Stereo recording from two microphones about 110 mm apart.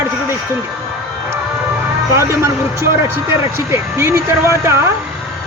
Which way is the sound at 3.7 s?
25° right (ahead or behind).